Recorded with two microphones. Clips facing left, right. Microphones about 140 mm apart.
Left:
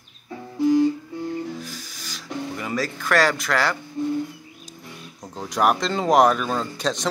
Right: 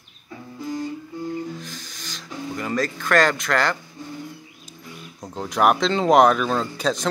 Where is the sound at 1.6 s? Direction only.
5° left (ahead or behind).